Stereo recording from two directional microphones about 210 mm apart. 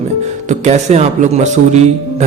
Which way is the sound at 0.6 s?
30° right (ahead or behind).